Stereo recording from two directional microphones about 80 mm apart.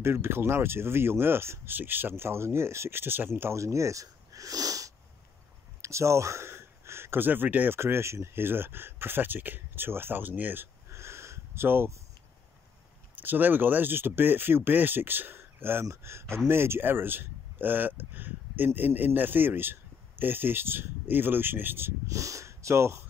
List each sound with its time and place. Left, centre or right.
0.0 s speech: right
10.9 s a sound: right
13.1 s speech: right
22.0 s speech: right